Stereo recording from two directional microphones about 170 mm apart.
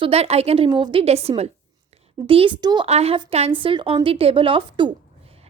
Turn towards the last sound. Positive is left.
turn(degrees=-30)  # may be behind; listen again after turning